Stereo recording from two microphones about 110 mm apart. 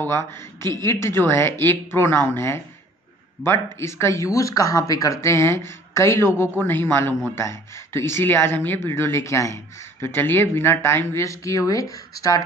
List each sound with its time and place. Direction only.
0.0 s speech: 25° left (ahead or behind)
3.8 s speech: 25° left (ahead or behind)